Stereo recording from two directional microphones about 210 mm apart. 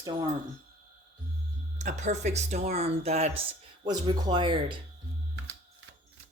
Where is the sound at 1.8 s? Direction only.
35° right (ahead or behind).